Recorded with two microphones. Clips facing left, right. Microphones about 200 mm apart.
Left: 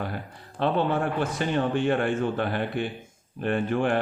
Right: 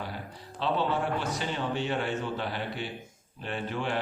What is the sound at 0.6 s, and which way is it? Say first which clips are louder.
A man's voice: left 4 dB; 55° left (ahead or behind).